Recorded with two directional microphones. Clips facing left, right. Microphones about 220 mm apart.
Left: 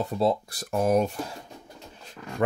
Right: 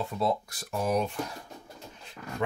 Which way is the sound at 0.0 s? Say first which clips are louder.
Left 4 dB; 35° left (ahead or behind).